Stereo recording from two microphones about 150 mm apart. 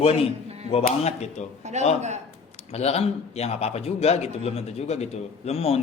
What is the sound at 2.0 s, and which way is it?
Speech, 50° right (ahead or behind).